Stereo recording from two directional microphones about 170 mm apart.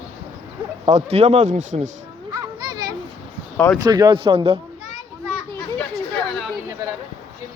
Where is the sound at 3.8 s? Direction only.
25° right (ahead or behind).